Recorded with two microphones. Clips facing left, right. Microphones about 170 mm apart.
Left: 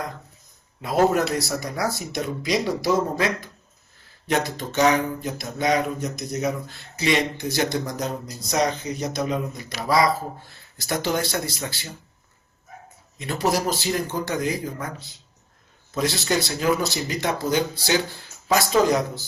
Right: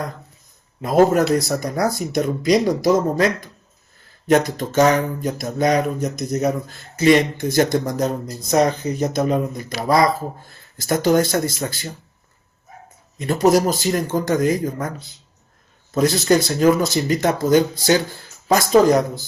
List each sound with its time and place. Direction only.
0.8 s speech: 45° right (ahead or behind)
4.3 s speech: 45° right (ahead or behind)
13.1 s speech: 45° right (ahead or behind)